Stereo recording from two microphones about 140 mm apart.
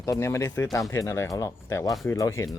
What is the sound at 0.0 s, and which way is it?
Speech, 20° left (ahead or behind).